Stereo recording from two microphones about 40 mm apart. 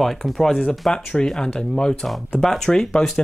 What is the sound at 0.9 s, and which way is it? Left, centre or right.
Speech, centre.